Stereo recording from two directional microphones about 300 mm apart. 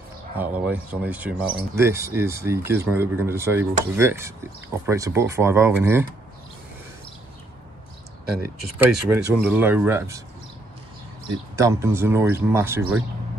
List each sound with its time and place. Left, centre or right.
0.4 s speech: centre
8.4 s speech: centre
11.5 s speech: centre